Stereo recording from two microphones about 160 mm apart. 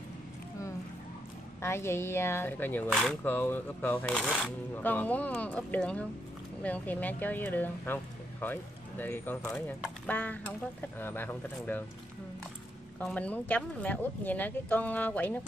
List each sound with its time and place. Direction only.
1.6 s speech: 15° left (ahead or behind)
4.2 s speech: centre (ahead or behind)
13.0 s speech: 10° left (ahead or behind)